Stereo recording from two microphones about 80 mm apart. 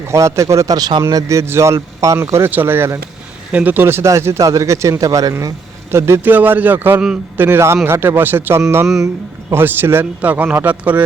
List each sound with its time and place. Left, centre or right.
0.1 s speech: right
1.1 s a man's voice: right
3.5 s speech: centre; by 5.3 s right
5.9 s speech: right
6.2 s a man's voice: right